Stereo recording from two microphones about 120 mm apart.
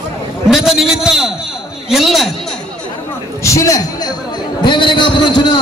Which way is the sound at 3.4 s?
25° left (ahead or behind).